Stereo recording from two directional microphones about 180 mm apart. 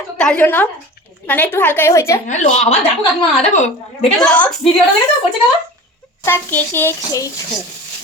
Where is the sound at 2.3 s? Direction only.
40° left (ahead or behind).